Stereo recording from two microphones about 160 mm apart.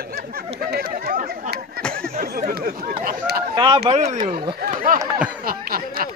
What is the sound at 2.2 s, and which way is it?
Speech, 65° right (ahead or behind).